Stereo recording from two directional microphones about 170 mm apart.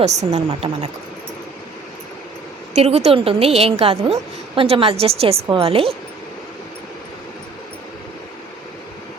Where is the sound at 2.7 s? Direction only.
40° right (ahead or behind).